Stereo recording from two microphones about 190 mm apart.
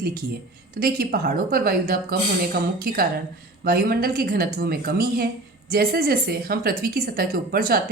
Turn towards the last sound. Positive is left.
turn(degrees=-50)  # may be behind; listen again after turning